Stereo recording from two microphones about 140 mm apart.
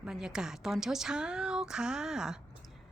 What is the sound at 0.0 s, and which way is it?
A woman's voice, 5° right (ahead or behind).